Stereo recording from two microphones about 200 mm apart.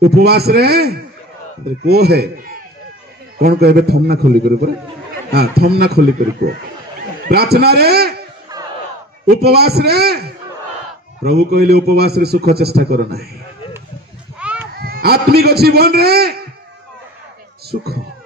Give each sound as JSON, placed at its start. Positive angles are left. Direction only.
{"t": 0.2, "sound": "a man's voice", "side_deg": -50}
{"t": 9.4, "sound": "a man's voice", "side_deg": -50}
{"t": 14.4, "sound": "sheep", "side_deg": -5}
{"t": 14.7, "sound": "a man's voice", "side_deg": -50}